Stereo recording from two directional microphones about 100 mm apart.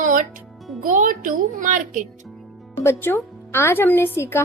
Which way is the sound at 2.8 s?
25° left (ahead or behind).